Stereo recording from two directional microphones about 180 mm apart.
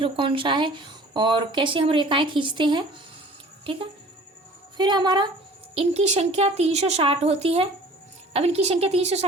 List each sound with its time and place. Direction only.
0.0 s speech: 30° right (ahead or behind)
4.8 s a woman's voice: 25° right (ahead or behind)